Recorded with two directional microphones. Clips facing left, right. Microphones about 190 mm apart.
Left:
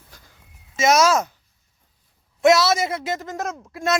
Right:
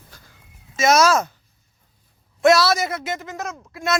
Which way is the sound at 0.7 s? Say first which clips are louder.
Right 1 dB; 20° left (ahead or behind).